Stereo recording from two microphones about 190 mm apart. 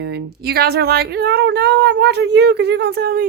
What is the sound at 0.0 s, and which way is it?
Speech, 60° right (ahead or behind).